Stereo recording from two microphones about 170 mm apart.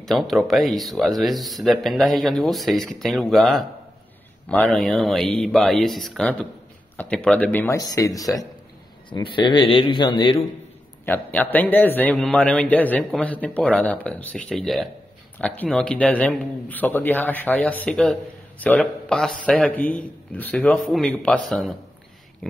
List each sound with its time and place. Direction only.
0.0 s a man's voice: centre (ahead or behind); by 10.3 s 30° left (ahead or behind)
11.1 s a man's voice: 10° left (ahead or behind)